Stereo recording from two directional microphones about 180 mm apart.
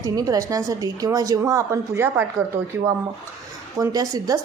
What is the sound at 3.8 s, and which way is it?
Speech, 20° right (ahead or behind).